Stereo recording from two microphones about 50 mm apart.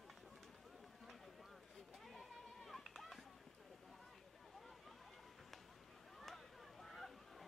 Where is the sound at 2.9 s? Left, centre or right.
Centre.